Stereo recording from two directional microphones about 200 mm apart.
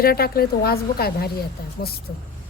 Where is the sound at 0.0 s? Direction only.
50° left (ahead or behind).